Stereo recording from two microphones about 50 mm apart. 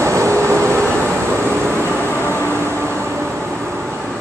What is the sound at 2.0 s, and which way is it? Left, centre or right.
Vehicle, left.